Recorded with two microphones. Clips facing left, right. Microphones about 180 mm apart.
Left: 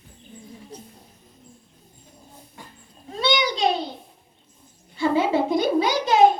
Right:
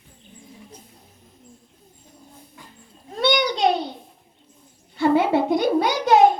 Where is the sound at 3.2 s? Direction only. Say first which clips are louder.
Right 2 dB; 60° right (ahead or behind).